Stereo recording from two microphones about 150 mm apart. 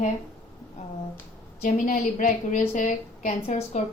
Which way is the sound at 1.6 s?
55° left (ahead or behind).